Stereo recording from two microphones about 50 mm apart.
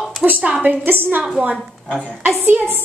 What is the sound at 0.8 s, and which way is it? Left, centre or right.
Speech, right.